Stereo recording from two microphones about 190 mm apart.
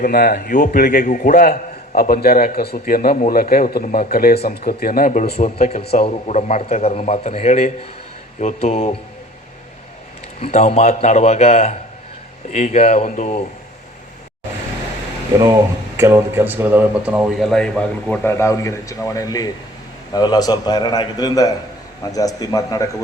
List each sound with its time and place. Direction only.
0.0 s a man's voice: 55° left (ahead or behind); by 9.0 s 35° left (ahead or behind)
10.4 s a man's voice: 35° left (ahead or behind)
15.4 s a man's voice: 15° right (ahead or behind); by 22.9 s 20° left (ahead or behind)